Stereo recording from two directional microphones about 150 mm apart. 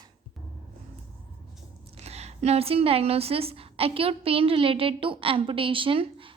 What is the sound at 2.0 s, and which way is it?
A woman's voice, 45° right (ahead or behind).